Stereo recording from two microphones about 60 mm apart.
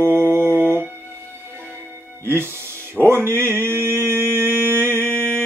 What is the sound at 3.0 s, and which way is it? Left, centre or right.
Mantra, right.